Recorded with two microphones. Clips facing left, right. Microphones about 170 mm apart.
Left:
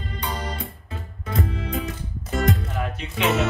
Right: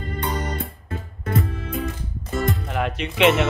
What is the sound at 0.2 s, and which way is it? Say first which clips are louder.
Music: right 3 dB; 55° right (ahead or behind).